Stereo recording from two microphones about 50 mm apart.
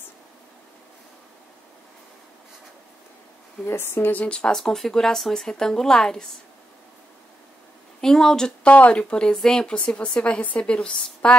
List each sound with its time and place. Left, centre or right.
3.6 s speech: left
4.1 s speech: left
4.6 s a woman's voice: centre
8.0 s a woman's voice: centre
8.6 s speech: left
9.1 s a woman's voice: centre